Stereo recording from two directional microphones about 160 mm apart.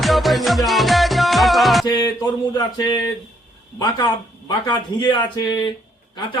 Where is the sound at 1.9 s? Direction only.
25° left (ahead or behind).